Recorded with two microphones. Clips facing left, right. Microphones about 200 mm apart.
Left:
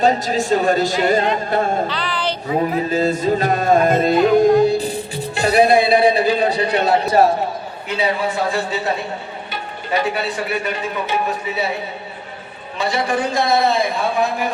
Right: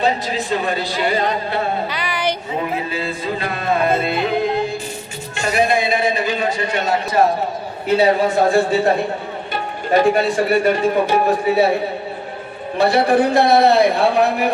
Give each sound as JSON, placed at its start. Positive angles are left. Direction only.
{"t": 0.0, "sound": "music", "side_deg": 45}
{"t": 1.9, "sound": "a sound", "side_deg": -10}
{"t": 2.7, "sound": "music", "side_deg": 45}
{"t": 7.9, "sound": "speech", "side_deg": -45}
{"t": 9.9, "sound": "speech", "side_deg": -45}
{"t": 11.4, "sound": "a man's voice", "side_deg": -60}
{"t": 12.7, "sound": "a man's voice", "side_deg": -60}